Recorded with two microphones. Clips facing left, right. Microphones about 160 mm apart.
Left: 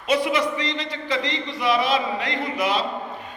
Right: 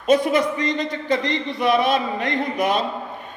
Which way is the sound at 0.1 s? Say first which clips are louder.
Right 4 dB; 45° right (ahead or behind).